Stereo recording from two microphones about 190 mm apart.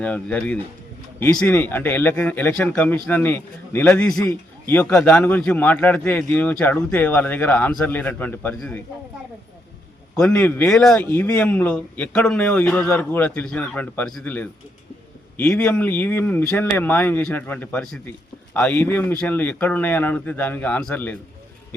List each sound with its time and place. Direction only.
0.0 s speech: 5° left (ahead or behind)
10.2 s speech: 5° left (ahead or behind)